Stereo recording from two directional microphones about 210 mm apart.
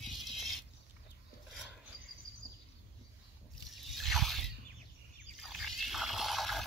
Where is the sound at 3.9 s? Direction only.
Centre (ahead or behind).